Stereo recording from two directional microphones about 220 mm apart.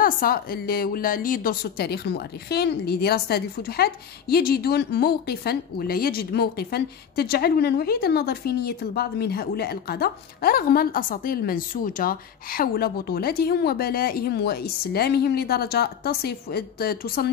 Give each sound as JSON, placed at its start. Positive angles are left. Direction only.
{"t": 0.0, "sound": "a woman's voice", "side_deg": 40}